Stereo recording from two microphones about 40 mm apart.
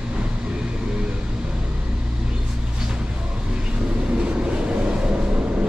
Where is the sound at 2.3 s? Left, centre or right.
Centre.